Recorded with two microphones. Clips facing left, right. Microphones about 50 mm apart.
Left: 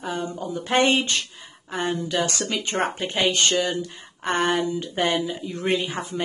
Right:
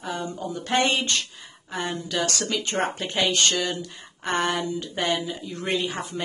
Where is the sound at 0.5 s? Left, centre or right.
Centre.